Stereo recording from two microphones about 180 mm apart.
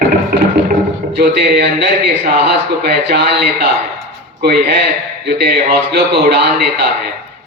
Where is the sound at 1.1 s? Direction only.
60° right (ahead or behind).